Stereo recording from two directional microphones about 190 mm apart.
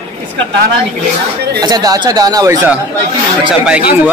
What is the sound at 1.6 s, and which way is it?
Speech, 20° right (ahead or behind).